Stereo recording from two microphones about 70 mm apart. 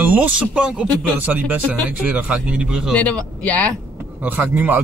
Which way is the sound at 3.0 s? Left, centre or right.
Centre.